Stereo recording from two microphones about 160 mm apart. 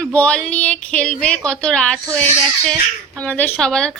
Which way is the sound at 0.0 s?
10° left (ahead or behind).